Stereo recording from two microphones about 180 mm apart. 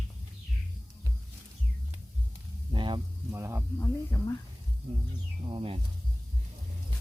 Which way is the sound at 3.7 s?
15° left (ahead or behind).